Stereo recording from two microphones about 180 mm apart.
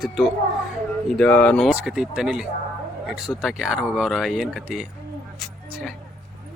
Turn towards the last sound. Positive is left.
turn(degrees=0)  # may be behind; listen again after turning